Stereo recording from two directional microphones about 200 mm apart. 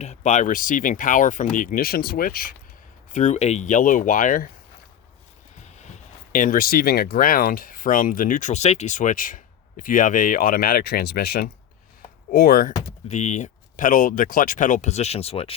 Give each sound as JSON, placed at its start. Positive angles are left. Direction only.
{"t": 0.0, "sound": "speech", "side_deg": 35}
{"t": 5.6, "sound": "speech", "side_deg": 35}